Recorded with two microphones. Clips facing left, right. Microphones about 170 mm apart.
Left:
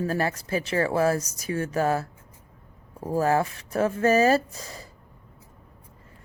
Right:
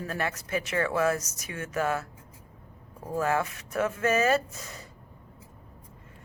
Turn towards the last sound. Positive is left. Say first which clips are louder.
# left 3 dB
turn(degrees=35)  # may be behind; listen again after turning